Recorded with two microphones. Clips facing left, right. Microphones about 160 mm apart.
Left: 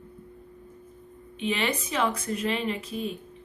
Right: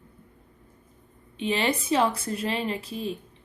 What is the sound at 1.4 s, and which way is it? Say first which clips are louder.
A woman's voice: right 2 dB; 30° right (ahead or behind).